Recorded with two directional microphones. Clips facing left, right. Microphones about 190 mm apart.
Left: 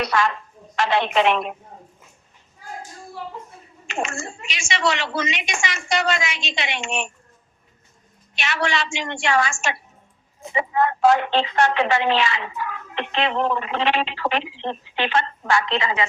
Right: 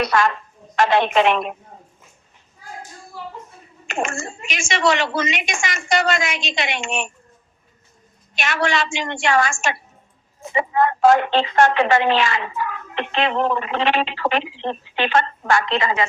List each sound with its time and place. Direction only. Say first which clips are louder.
0.0 s a woman's voice: right 3 dB; 50° right (ahead or behind)
3.8 s a woman's voice: right 2 dB; 50° right (ahead or behind)
8.4 s a woman's voice: right 3 dB; 50° right (ahead or behind)